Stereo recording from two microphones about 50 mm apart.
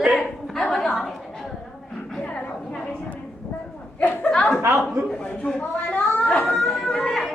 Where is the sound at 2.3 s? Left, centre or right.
Left.